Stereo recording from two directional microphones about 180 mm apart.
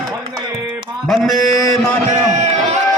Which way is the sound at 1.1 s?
Centre (ahead or behind).